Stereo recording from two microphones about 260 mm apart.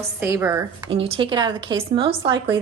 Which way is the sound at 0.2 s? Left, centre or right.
Centre.